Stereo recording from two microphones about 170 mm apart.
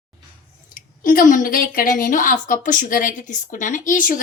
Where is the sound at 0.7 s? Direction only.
55° left (ahead or behind).